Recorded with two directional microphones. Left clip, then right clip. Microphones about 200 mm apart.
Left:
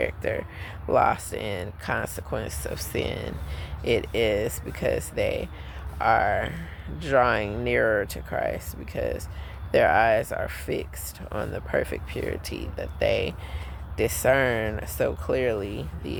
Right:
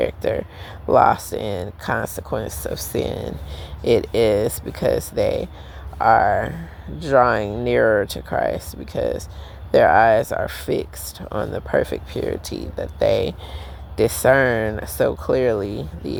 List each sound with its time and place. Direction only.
0.0 s speech: 25° right (ahead or behind)